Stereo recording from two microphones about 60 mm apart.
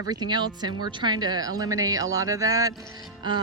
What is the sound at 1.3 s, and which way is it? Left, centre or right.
A woman's voice, right.